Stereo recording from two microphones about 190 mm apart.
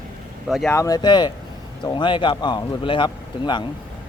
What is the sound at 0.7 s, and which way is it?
A man's voice, 15° left (ahead or behind).